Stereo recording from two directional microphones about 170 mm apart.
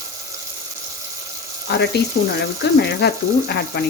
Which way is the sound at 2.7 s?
75° left (ahead or behind).